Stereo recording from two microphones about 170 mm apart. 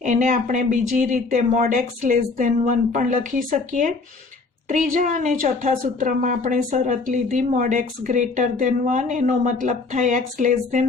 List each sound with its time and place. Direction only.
0.0 s a woman's voice: 45° right (ahead or behind)